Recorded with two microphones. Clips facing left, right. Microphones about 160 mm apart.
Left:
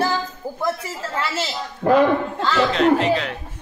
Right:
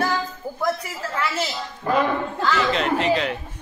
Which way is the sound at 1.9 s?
70° left (ahead or behind).